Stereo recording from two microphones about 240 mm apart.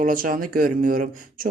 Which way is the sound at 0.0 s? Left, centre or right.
Right.